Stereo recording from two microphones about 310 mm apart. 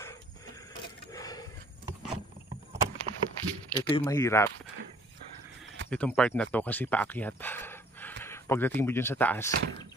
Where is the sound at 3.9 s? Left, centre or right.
Centre.